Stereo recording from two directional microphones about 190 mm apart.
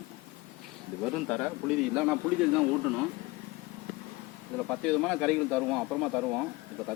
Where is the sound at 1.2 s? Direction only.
5° left (ahead or behind).